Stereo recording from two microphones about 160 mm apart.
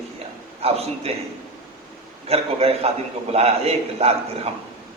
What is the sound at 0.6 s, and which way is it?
Speech, 40° right (ahead or behind).